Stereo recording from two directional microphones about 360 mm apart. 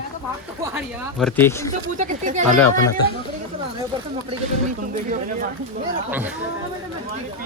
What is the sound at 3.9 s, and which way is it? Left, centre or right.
Speech, centre.